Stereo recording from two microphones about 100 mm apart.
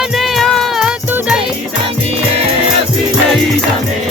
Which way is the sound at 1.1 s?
20° right (ahead or behind).